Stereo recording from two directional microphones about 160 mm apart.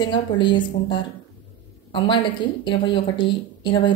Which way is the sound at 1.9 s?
30° left (ahead or behind).